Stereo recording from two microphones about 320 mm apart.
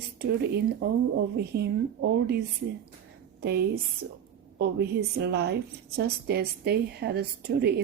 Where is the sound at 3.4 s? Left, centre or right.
Right.